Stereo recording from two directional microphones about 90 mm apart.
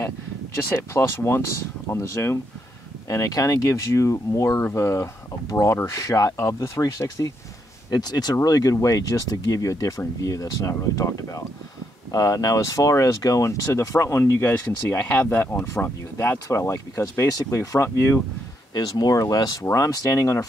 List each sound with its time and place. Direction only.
0.7 s speech: 30° left (ahead or behind)
7.9 s speech: 50° left (ahead or behind); by 15.0 s 30° left (ahead or behind)
15.0 s speech: 20° left (ahead or behind)
18.7 s speech: 45° left (ahead or behind)